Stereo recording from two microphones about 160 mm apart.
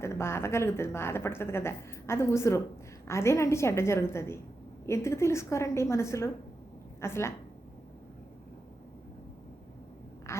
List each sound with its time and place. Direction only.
0.0 s speech: 15° left (ahead or behind)
10.3 s quack: 15° left (ahead or behind)